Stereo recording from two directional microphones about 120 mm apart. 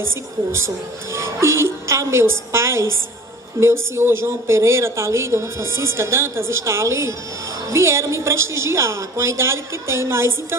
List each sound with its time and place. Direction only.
0.5 s a woman's voice: 20° right (ahead or behind)